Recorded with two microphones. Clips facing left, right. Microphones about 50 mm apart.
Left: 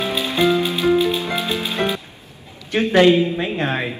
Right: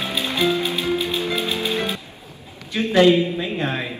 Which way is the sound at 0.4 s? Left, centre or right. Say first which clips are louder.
Left 4 dB; left.